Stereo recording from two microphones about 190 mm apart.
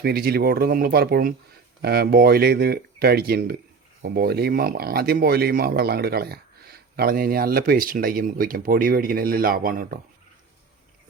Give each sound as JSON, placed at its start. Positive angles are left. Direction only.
{"t": 0.0, "sound": "speech", "side_deg": -55}